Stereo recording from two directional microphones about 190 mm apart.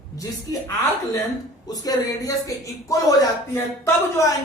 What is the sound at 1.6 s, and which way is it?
Speech, 20° left (ahead or behind).